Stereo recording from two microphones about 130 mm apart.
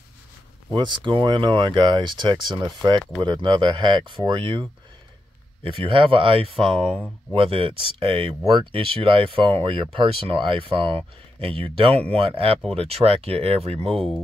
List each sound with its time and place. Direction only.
0.7 s speech: 35° right (ahead or behind); by 13.9 s 50° right (ahead or behind)
13.9 s speech: 5° left (ahead or behind)